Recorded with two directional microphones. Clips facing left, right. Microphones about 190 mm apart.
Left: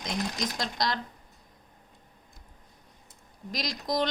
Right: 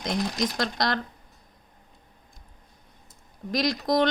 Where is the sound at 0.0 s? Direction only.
65° right (ahead or behind).